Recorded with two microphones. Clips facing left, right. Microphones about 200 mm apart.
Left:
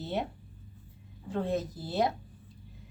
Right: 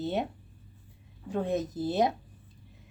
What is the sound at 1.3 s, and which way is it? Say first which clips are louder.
Speech: right 2 dB; 15° right (ahead or behind).